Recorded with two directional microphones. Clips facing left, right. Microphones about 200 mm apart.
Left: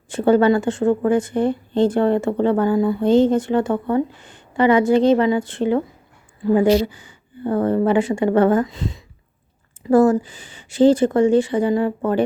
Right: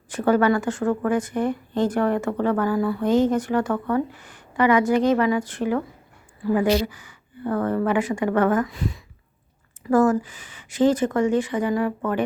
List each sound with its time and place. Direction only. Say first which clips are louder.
0.1 s a woman's voice: left 4 dB; 25° left (ahead or behind)